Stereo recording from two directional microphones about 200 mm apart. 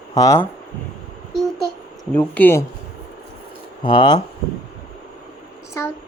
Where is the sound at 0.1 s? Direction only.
15° left (ahead or behind).